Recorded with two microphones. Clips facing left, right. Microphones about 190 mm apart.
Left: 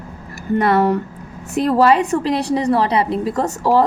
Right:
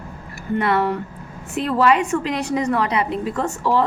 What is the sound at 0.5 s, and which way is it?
A woman's voice, 40° left (ahead or behind).